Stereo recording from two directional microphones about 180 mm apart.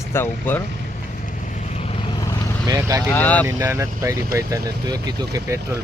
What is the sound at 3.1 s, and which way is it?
Speech, 10° left (ahead or behind).